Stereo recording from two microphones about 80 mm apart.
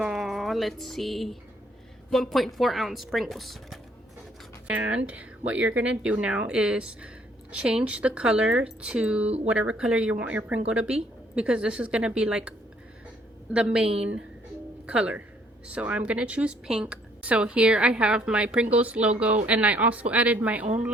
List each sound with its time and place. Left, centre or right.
0.0 s a sound: centre
2.0 s speech: centre
4.7 s speech: centre
14.8 s speech: centre